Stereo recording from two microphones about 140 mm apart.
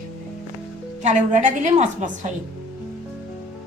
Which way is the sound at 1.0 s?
55° right (ahead or behind).